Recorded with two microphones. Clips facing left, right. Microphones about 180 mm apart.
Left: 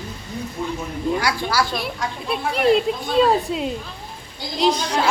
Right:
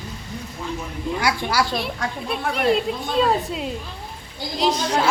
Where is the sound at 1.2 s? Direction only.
20° right (ahead or behind).